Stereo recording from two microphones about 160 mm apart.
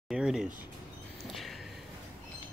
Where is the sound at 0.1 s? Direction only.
5° right (ahead or behind).